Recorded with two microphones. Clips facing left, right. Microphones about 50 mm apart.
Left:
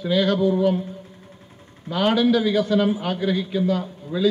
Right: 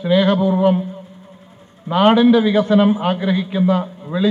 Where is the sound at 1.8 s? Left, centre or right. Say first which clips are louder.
Right 7 dB; right.